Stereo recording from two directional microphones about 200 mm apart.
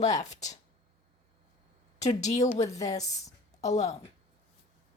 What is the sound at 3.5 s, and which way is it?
Speech, 35° left (ahead or behind).